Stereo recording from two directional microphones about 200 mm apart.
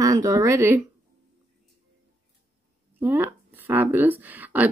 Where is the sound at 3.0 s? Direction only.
10° right (ahead or behind).